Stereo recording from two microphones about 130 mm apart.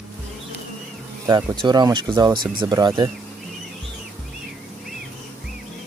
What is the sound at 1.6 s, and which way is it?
Speech, 35° right (ahead or behind).